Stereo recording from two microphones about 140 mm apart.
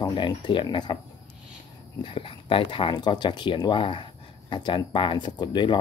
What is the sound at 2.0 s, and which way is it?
Speech, 40° left (ahead or behind).